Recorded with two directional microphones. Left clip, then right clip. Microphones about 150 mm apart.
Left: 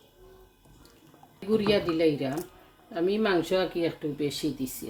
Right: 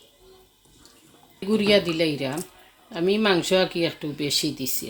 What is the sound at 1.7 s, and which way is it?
Speech, 65° right (ahead or behind).